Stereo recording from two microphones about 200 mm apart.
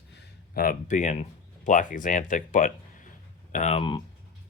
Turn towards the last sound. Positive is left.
turn(degrees=25)  # may be behind; listen again after turning